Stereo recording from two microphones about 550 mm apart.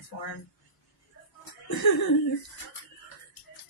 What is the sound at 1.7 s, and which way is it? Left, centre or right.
Speech, left.